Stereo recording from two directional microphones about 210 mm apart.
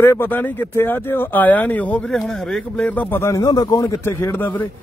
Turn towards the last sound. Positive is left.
turn(degrees=10)  # may be behind; listen again after turning